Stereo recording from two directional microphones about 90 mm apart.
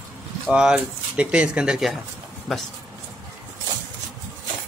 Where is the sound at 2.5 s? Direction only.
5° left (ahead or behind).